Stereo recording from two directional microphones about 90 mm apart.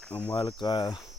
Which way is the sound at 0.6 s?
55° left (ahead or behind).